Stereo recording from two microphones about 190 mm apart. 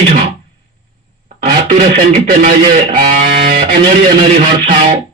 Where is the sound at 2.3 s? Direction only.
40° right (ahead or behind).